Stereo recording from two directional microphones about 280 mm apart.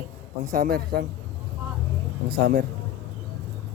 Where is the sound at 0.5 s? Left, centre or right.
Right.